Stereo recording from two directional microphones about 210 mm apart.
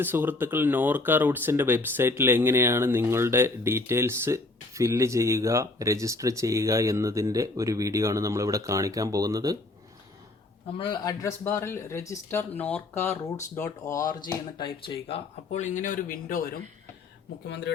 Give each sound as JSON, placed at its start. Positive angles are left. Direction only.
{"t": 0.0, "sound": "speech", "side_deg": -10}
{"t": 10.8, "sound": "speech", "side_deg": 20}